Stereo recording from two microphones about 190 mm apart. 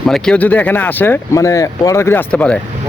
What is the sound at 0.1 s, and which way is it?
Speech, 5° left (ahead or behind).